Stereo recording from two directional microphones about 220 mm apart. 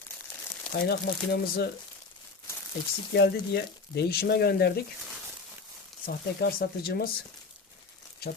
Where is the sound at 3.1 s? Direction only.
45° left (ahead or behind).